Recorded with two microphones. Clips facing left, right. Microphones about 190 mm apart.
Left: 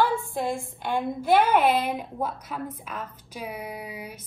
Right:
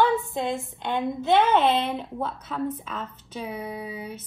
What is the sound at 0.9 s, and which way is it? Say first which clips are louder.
Speech: even; 25° right (ahead or behind).